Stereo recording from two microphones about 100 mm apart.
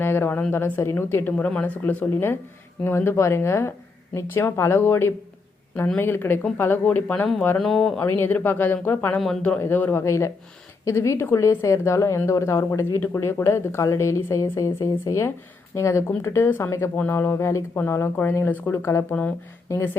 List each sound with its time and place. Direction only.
0.0 s a woman's voice: 20° left (ahead or behind)
7.6 s speech: 5° left (ahead or behind)
8.0 s a woman's voice: 20° left (ahead or behind)